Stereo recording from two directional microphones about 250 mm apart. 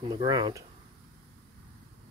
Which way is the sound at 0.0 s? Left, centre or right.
Centre.